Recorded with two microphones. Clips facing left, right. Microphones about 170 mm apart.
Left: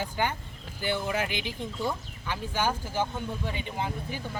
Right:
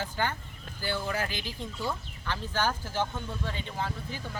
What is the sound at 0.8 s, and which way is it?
Speech, 20° left (ahead or behind).